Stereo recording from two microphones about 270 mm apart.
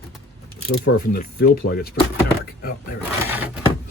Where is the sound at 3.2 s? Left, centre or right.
Centre.